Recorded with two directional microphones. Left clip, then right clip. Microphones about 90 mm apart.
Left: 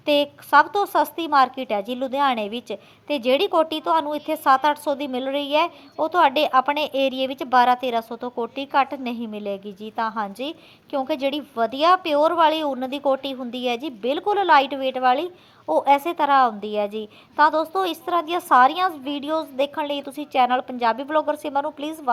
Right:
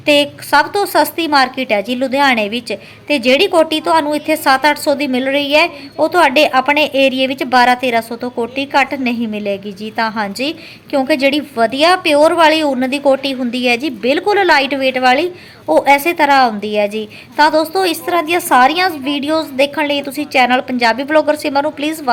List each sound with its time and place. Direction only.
0.0 s a woman's voice: 35° left (ahead or behind)
8.1 s a woman's voice: 20° left (ahead or behind)
8.5 s a woman's voice: 30° left (ahead or behind)